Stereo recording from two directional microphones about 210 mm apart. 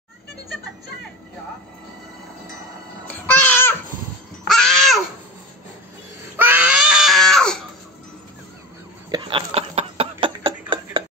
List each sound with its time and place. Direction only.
3.1 s babbling: 10° left (ahead or behind)
4.5 s crow: centre (ahead or behind)
6.3 s baby cry: 10° right (ahead or behind)
9.1 s a sound: 25° right (ahead or behind)